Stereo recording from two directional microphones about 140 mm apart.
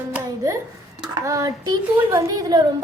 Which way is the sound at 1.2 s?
25° right (ahead or behind).